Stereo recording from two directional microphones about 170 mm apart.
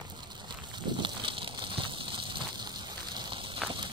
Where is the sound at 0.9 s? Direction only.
30° right (ahead or behind).